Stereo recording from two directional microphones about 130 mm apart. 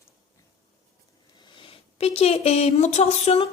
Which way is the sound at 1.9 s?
50° left (ahead or behind).